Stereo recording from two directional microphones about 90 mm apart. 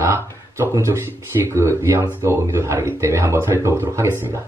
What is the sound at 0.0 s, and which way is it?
Speech, 30° right (ahead or behind).